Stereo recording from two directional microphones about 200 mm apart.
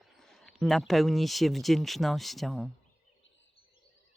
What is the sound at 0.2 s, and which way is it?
Speech, centre (ahead or behind).